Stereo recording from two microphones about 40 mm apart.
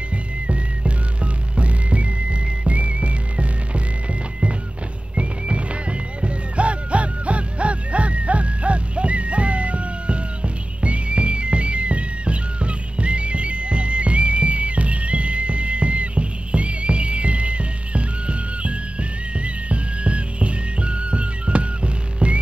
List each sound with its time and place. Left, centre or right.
0.5 s music: right